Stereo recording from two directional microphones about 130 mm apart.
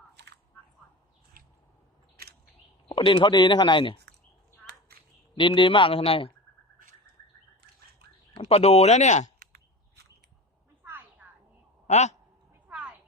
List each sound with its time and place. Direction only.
2.9 s speech: 40° left (ahead or behind)
5.3 s speech: 40° left (ahead or behind)
8.4 s speech: 50° left (ahead or behind)
10.8 s a sound: 15° right (ahead or behind)
11.9 s speech: 60° left (ahead or behind)
12.6 s a sound: 10° right (ahead or behind)